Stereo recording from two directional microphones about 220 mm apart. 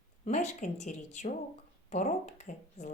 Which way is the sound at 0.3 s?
30° left (ahead or behind).